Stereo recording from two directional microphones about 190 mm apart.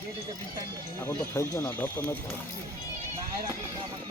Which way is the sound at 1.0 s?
15° left (ahead or behind).